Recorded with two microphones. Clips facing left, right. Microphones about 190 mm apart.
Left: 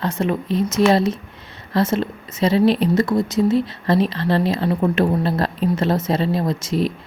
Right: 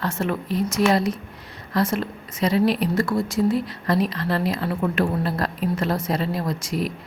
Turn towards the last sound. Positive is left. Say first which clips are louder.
# left 5 dB
turn(degrees=25)  # may be behind; listen again after turning